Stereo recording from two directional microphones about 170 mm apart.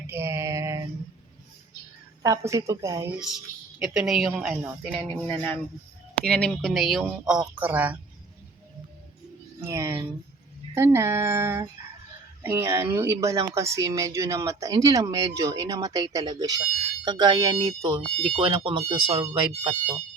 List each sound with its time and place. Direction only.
0.1 s female singing: 15° right (ahead or behind)
2.2 s speech: 20° right (ahead or behind)
3.2 s a woman's voice: centre (ahead or behind)
5.2 s a woman's voice: 10° left (ahead or behind); by 7.9 s 10° right (ahead or behind)
9.6 s speech: 15° right (ahead or behind)